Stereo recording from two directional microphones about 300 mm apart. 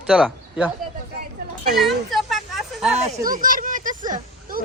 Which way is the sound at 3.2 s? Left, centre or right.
Right.